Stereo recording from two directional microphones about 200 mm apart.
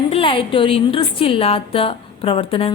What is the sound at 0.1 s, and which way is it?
A woman's voice, 25° left (ahead or behind).